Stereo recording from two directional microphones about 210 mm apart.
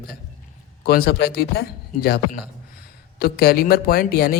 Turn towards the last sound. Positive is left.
turn(degrees=45)  # may be behind; listen again after turning